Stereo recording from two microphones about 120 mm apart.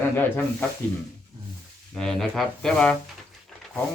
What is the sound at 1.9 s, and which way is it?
Speech, centre (ahead or behind).